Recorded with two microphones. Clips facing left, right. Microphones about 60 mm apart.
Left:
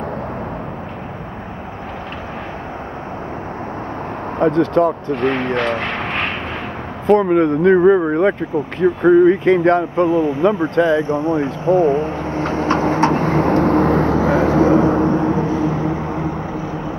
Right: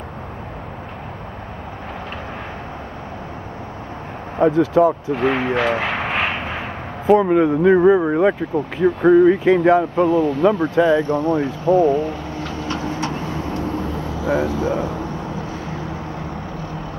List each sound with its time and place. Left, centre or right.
4.4 s speech: centre
9.9 s speech: centre
11.0 s vehicle: left